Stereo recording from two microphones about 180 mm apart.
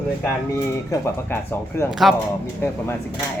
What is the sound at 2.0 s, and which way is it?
Speech, centre (ahead or behind).